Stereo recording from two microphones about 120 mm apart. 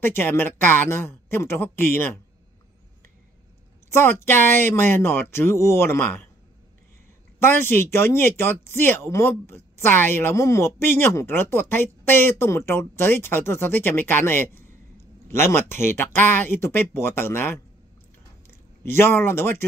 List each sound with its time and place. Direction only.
0.0 s a woman's voice: 20° left (ahead or behind)
3.9 s a woman's voice: 20° left (ahead or behind)
7.3 s a woman's voice: 20° left (ahead or behind)